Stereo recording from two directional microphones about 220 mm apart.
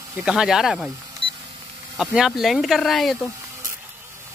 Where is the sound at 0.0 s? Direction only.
5° right (ahead or behind).